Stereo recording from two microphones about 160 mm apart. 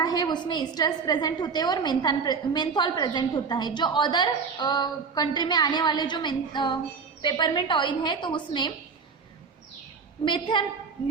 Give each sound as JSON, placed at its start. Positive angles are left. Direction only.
{"t": 0.0, "sound": "a woman's voice", "side_deg": 25}
{"t": 10.2, "sound": "a woman's voice", "side_deg": 30}